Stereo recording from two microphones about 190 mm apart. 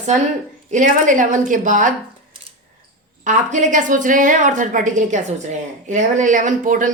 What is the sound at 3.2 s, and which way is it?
A woman's voice, 40° right (ahead or behind).